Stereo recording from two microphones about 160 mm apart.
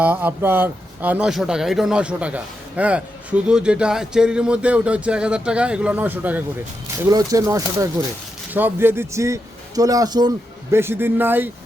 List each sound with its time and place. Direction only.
0.0 s speech: 10° right (ahead or behind)
7.0 s speech: 20° right (ahead or behind)